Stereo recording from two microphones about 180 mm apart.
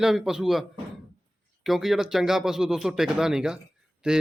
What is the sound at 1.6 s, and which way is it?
A man's voice, centre (ahead or behind).